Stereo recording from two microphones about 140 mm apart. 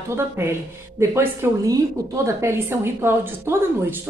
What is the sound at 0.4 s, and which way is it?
Speech, 15° right (ahead or behind).